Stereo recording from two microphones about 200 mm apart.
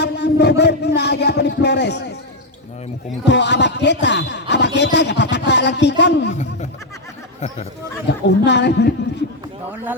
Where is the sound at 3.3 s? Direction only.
60° left (ahead or behind).